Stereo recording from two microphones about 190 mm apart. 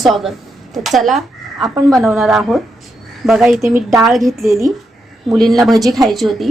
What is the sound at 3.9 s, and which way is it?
A woman's voice, centre (ahead or behind).